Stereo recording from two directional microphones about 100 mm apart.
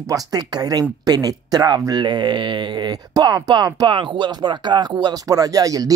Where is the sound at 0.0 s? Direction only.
35° right (ahead or behind).